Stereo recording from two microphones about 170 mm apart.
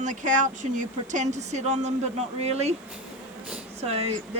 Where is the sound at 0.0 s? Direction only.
45° right (ahead or behind).